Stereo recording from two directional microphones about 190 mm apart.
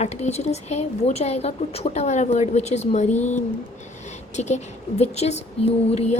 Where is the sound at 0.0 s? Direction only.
35° left (ahead or behind).